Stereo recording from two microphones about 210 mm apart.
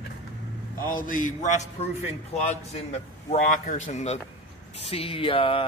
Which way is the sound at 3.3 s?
35° left (ahead or behind).